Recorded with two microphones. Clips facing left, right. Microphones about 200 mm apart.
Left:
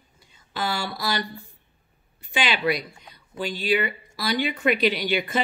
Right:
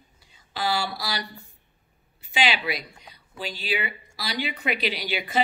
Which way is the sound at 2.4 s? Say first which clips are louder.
Left 2 dB; 50° left (ahead or behind).